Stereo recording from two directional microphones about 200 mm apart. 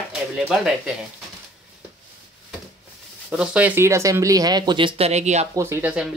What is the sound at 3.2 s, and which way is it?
Speech, 5° right (ahead or behind).